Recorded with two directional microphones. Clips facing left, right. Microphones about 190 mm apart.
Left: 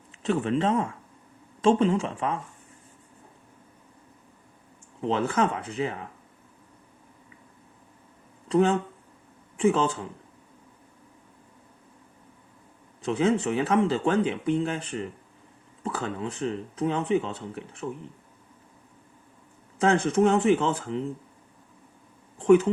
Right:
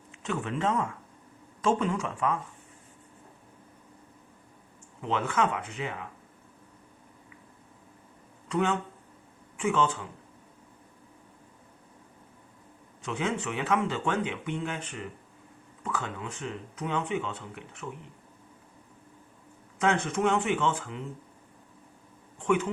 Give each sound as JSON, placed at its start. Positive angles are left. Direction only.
{"t": 0.2, "sound": "speech", "side_deg": 30}
{"t": 4.9, "sound": "speech", "side_deg": 35}
{"t": 8.4, "sound": "speech", "side_deg": 35}
{"t": 13.0, "sound": "speech", "side_deg": 35}
{"t": 19.8, "sound": "speech", "side_deg": 35}
{"t": 22.4, "sound": "speech", "side_deg": 35}